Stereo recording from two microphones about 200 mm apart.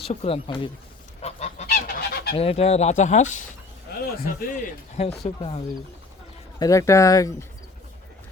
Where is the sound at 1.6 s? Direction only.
50° left (ahead or behind).